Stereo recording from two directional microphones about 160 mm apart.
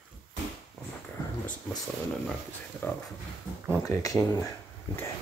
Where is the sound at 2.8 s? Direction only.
15° left (ahead or behind).